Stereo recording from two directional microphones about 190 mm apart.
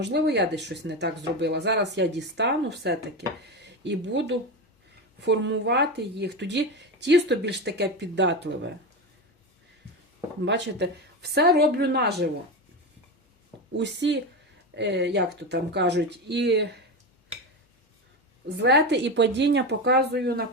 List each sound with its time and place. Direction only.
0.0 s speech: 65° right (ahead or behind)
10.4 s speech: 65° right (ahead or behind)
13.7 s speech: 65° right (ahead or behind)
18.4 s speech: 60° right (ahead or behind)